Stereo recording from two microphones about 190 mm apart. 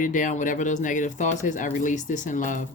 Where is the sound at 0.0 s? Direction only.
45° left (ahead or behind).